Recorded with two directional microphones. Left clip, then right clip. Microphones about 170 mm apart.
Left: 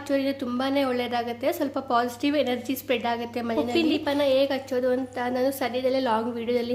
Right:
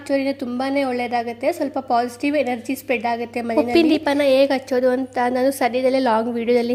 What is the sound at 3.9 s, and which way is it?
A woman's voice, 45° right (ahead or behind).